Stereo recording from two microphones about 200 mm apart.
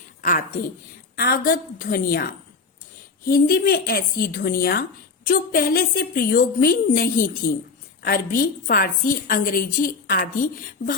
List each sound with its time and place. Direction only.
0.2 s a woman's voice: 45° left (ahead or behind)